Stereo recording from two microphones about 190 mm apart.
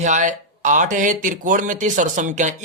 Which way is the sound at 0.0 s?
40° right (ahead or behind).